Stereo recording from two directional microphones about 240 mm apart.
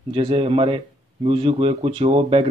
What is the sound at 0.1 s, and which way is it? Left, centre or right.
Speech, right.